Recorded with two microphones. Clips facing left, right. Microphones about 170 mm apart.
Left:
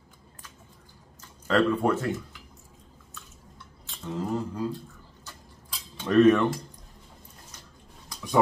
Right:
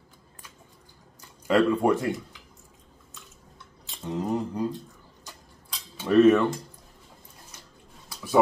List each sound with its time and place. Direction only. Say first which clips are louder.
1.5 s speech: right 2 dB; 10° right (ahead or behind)
4.0 s mantra: right 2 dB; 20° right (ahead or behind)
5.9 s cutlery: right 1 dB; 10° right (ahead or behind)
8.1 s a sound: right 4 dB; 5° right (ahead or behind)